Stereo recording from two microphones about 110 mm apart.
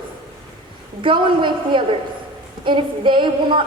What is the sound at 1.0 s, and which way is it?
A woman's voice, 50° right (ahead or behind).